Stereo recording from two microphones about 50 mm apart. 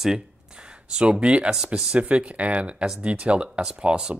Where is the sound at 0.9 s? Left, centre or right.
Centre.